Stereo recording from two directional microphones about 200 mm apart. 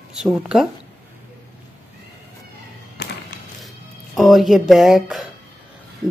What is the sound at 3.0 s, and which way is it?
Music, 55° left (ahead or behind).